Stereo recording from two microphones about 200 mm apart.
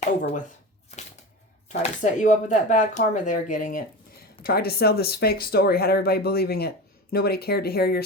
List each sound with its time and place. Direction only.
1.8 s speech: 40° left (ahead or behind)